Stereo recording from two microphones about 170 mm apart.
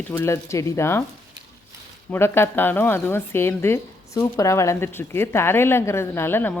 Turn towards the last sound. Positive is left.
turn(degrees=10)  # may be behind; listen again after turning